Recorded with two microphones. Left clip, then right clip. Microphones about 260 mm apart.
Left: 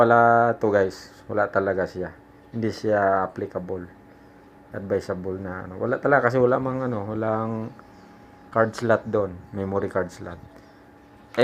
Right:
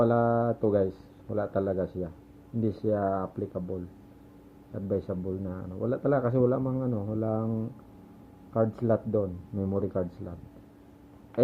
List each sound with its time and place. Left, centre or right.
0.1 s speech: left
4.7 s speech: left